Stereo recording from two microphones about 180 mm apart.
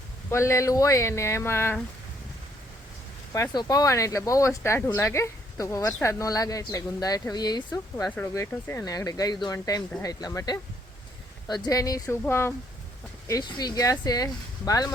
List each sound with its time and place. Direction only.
0.3 s speech: 15° left (ahead or behind)
3.3 s speech: 20° left (ahead or behind)
8.1 s speech: 10° left (ahead or behind)